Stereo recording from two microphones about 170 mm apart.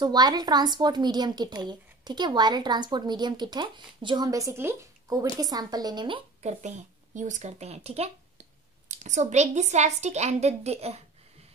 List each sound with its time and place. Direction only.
0.0 s a woman's voice: 25° right (ahead or behind)
7.2 s speech: 45° right (ahead or behind)